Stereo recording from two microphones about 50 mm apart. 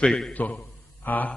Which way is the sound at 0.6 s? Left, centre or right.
Left.